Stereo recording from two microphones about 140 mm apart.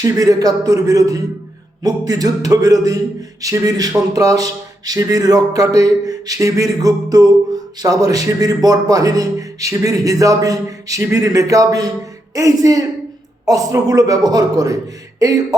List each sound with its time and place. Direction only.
0.0 s a man's voice: 25° right (ahead or behind)